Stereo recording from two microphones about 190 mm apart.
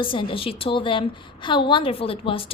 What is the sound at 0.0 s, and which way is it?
A woman's voice, 25° left (ahead or behind).